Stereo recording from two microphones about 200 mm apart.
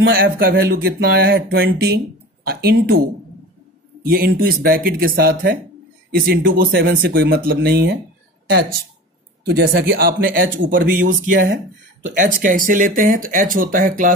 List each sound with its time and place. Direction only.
0.0 s speech: 50° right (ahead or behind)
4.0 s speech: 50° right (ahead or behind)